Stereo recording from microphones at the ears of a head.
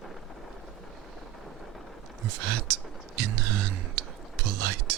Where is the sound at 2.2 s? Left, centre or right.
Right.